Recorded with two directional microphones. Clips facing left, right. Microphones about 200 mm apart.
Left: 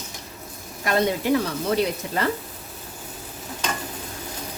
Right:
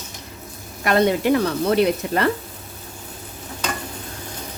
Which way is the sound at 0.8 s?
65° right (ahead or behind).